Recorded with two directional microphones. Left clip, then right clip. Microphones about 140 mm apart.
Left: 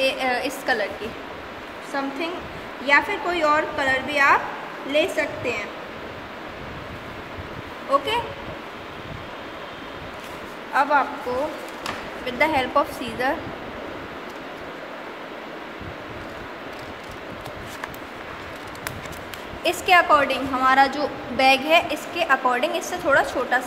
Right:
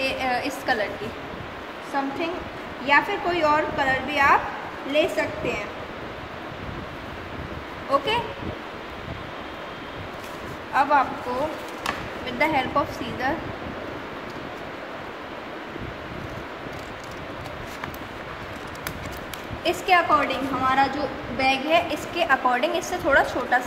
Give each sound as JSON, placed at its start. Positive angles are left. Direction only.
{"t": 0.0, "sound": "speech", "side_deg": 25}
{"t": 2.0, "sound": "a woman's voice", "side_deg": 0}
{"t": 10.7, "sound": "speech", "side_deg": 15}
{"t": 12.3, "sound": "speech", "side_deg": 25}
{"t": 19.6, "sound": "a woman's voice", "side_deg": 35}
{"t": 20.1, "sound": "a woman's voice", "side_deg": 50}
{"t": 21.8, "sound": "a woman's voice", "side_deg": 10}